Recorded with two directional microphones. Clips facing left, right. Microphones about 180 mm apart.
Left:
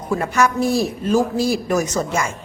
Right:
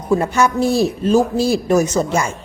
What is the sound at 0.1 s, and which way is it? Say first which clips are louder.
Speech: right 3 dB; 25° right (ahead or behind).